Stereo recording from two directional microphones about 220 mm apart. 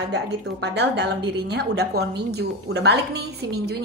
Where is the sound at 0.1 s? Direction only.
50° right (ahead or behind).